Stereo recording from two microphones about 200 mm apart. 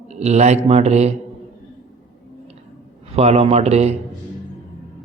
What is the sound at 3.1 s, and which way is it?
Speech, 30° right (ahead or behind).